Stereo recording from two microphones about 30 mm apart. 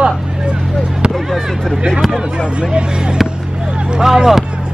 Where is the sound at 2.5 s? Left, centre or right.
Right.